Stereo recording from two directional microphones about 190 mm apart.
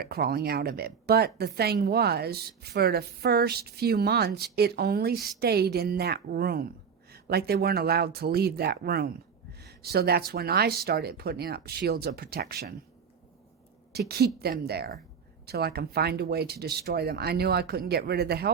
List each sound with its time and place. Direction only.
0.0 s speech: 55° right (ahead or behind)
13.9 s speech: 55° right (ahead or behind)